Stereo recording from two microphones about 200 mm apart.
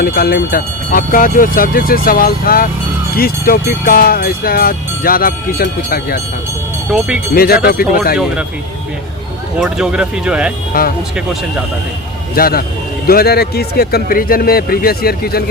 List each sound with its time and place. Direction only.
0.0 s speech: 50° left (ahead or behind)
7.3 s speech: 50° left (ahead or behind)
9.6 s speech: 5° right (ahead or behind)
12.3 s speech: 50° left (ahead or behind)